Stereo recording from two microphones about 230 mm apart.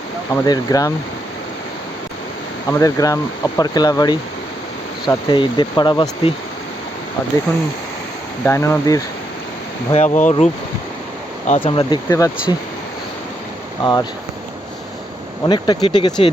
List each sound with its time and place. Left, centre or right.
0.4 s speech: centre
2.6 s speech: centre
8.4 s speech: centre
9.9 s speech: left; by 12.5 s centre
13.8 s speech: centre
15.4 s speech: centre